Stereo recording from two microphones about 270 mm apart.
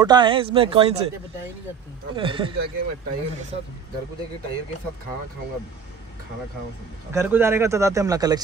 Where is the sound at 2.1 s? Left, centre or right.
Centre.